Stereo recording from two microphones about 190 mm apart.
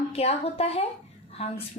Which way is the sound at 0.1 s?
30° left (ahead or behind).